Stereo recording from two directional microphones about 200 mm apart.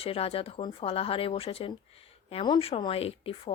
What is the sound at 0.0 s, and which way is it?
Speech, 30° left (ahead or behind).